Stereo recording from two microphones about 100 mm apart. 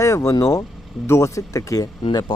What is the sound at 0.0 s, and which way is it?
Speech, 30° left (ahead or behind).